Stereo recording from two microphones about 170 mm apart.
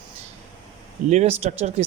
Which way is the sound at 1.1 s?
40° right (ahead or behind).